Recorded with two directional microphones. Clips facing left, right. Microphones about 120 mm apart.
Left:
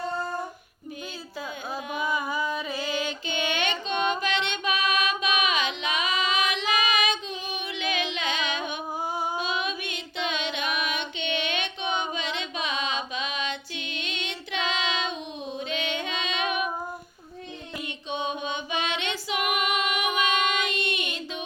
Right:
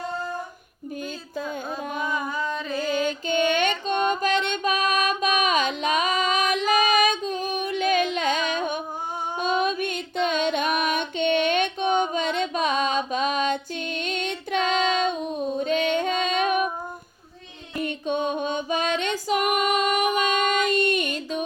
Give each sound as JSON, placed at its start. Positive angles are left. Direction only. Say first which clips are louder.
{"t": 2.0, "sound": "a sound", "louder": "left 1 dB", "side_deg": 5}
{"t": 2.8, "sound": "music", "louder": "right 5 dB", "side_deg": -45}
{"t": 17.7, "sound": "female singing", "louder": "right 7 dB", "side_deg": -50}